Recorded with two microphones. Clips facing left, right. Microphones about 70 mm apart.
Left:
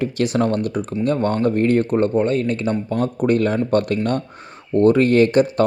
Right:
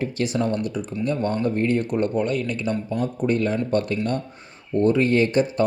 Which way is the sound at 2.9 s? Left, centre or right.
Left.